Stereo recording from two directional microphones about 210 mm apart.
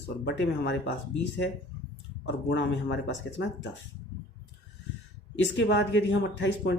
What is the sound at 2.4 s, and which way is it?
Speech, 55° left (ahead or behind).